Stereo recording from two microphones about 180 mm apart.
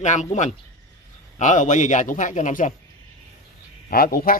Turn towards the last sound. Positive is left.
turn(degrees=55)  # may be behind; listen again after turning